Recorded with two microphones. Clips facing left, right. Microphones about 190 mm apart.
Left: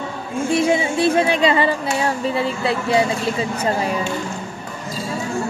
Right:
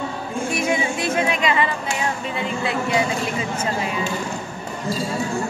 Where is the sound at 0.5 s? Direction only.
30° left (ahead or behind).